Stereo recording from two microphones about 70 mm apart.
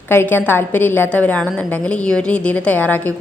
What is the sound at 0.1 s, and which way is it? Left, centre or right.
A woman's voice, left.